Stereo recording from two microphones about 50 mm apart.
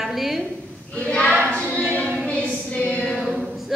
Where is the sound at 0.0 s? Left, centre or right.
Centre.